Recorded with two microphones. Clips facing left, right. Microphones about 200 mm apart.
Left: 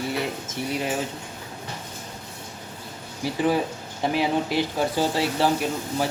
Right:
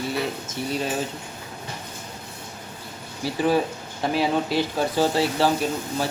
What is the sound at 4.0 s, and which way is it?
Speech, 15° left (ahead or behind).